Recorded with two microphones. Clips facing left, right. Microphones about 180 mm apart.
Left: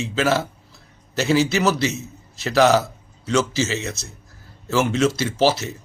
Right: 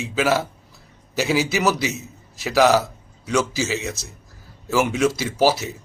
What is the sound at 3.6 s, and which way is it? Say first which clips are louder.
Speech: right 1 dB; centre (ahead or behind).